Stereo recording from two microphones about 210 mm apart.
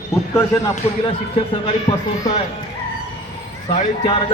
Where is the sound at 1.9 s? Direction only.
30° left (ahead or behind).